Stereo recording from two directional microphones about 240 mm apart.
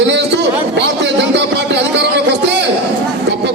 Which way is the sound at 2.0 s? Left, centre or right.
Right.